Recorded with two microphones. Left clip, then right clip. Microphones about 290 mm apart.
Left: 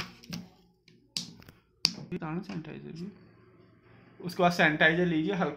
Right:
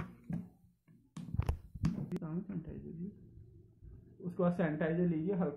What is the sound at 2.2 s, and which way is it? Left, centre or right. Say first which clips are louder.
Speech: left 7 dB; left.